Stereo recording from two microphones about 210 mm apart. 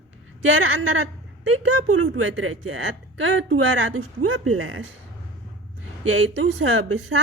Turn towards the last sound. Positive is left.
turn(degrees=-75)  # may be behind; listen again after turning